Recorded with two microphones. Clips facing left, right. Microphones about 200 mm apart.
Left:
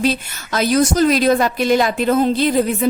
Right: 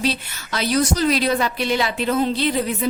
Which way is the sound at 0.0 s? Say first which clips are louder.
Left 5 dB; 50° left (ahead or behind).